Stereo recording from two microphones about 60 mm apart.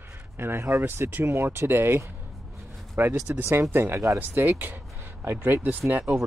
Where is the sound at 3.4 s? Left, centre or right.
Right.